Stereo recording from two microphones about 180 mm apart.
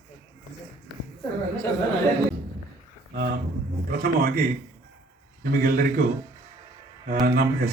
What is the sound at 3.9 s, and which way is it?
Speech, 60° right (ahead or behind).